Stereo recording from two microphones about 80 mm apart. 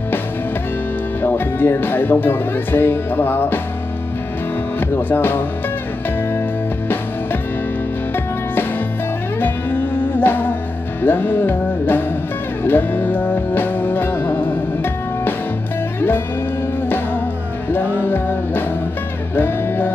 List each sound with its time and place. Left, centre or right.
1.2 s speech: left
4.7 s speech: left
9.4 s music: left
17.6 s music: left